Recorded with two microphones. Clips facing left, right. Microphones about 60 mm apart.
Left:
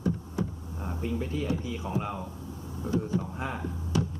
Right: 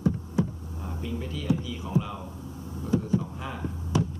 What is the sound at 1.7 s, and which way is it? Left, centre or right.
Speech, left.